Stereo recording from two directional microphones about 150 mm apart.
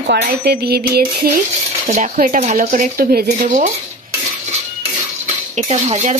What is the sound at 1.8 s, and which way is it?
Speech, 50° right (ahead or behind).